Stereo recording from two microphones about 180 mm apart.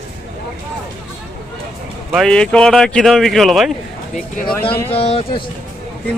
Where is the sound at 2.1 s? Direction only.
Centre (ahead or behind).